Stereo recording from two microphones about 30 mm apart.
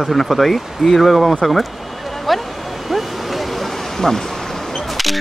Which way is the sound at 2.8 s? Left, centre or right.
Centre.